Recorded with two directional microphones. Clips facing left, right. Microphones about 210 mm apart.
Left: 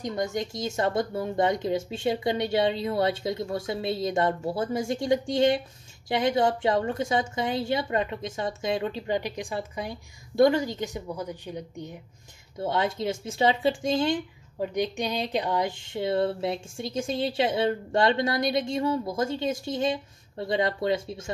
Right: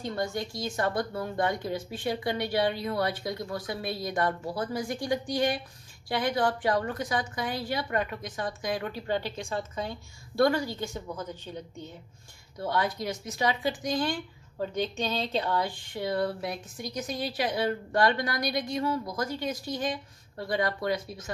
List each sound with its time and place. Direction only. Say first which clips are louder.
0.0 s speech: left 3 dB; 20° left (ahead or behind)